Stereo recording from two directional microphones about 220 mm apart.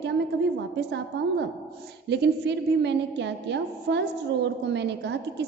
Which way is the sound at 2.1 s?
50° right (ahead or behind).